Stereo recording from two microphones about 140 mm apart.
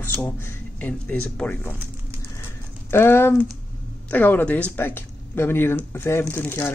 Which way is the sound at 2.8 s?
15° left (ahead or behind).